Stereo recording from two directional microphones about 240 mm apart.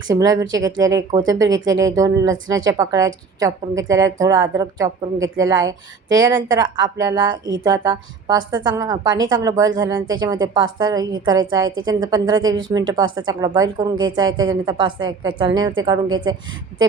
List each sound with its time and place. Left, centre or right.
0.1 s a woman's voice: centre